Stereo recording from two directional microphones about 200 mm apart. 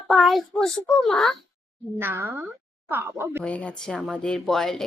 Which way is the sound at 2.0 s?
10° right (ahead or behind).